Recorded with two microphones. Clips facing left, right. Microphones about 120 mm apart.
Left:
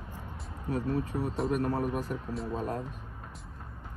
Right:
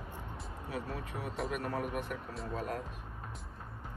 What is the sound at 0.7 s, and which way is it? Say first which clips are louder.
A man's voice: left 9 dB; 35° left (ahead or behind).